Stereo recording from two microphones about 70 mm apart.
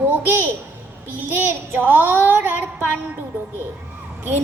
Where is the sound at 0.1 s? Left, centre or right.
Right.